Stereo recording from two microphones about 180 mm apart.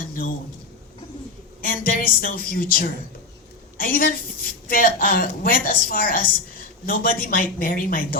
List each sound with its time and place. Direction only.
1.6 s a woman's voice: 55° left (ahead or behind)